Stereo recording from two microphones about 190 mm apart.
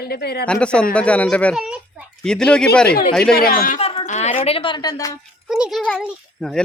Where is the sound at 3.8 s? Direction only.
30° left (ahead or behind).